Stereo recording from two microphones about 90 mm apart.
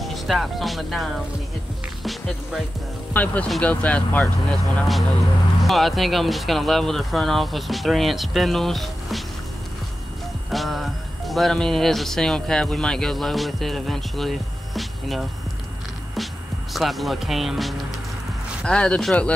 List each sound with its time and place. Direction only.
0.0 s speech: centre (ahead or behind)
2.0 s speech: centre (ahead or behind)
3.1 s speech: 20° left (ahead or behind)
5.6 s speech: centre (ahead or behind)
10.5 s speech: centre (ahead or behind)
16.7 s speech: centre (ahead or behind)
18.7 s speech: 10° left (ahead or behind)